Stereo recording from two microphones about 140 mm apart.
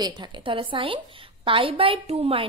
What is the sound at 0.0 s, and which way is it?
A woman's voice, 35° right (ahead or behind).